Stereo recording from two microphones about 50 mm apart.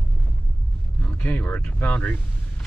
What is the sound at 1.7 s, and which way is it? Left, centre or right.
Speech, left.